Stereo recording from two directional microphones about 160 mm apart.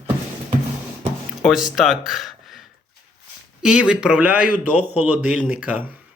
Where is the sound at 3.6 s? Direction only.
5° right (ahead or behind).